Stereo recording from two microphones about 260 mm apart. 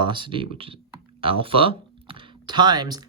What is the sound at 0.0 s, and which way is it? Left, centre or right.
Speech, centre.